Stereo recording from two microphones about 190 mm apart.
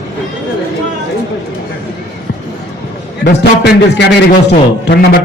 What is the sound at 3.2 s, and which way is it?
A man's voice, 60° left (ahead or behind).